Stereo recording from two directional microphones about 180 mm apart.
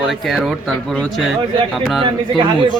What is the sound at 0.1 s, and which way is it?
Speech, centre (ahead or behind).